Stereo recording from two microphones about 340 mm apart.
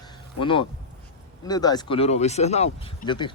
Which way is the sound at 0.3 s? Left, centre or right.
Centre.